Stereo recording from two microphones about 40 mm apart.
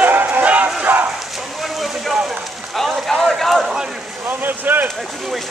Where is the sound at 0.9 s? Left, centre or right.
Right.